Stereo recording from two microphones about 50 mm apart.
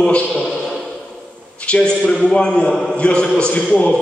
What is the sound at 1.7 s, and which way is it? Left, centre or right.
A man's voice, left.